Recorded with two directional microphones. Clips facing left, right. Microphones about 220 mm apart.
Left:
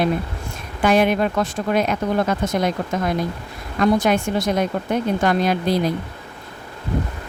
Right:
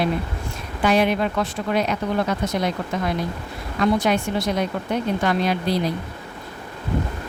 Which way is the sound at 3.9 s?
50° left (ahead or behind).